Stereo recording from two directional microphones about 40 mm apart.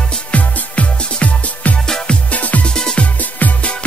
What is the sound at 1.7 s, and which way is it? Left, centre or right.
Music, centre.